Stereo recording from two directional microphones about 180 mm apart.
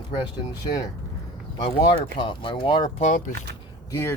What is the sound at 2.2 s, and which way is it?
Speech, 25° left (ahead or behind).